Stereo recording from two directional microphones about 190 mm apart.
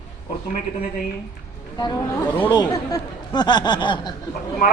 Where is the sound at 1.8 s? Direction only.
20° left (ahead or behind).